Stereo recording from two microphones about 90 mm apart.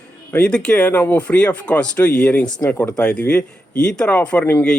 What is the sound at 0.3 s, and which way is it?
Speech, 10° left (ahead or behind).